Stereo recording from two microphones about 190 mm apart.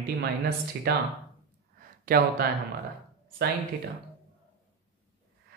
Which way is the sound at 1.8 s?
50° right (ahead or behind).